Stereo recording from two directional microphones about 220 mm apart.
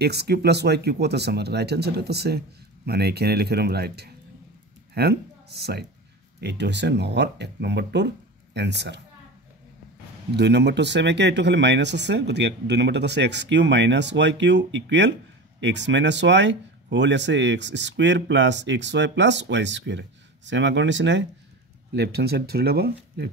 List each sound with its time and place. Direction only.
0.0 s speech: 50° right (ahead or behind)
10.3 s speech: 50° right (ahead or behind)